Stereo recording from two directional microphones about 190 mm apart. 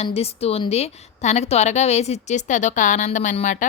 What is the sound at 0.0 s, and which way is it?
A woman's voice, 30° left (ahead or behind).